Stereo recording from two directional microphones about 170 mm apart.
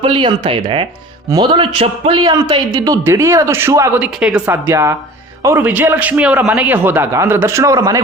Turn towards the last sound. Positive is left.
turn(degrees=-20)  # may be behind; listen again after turning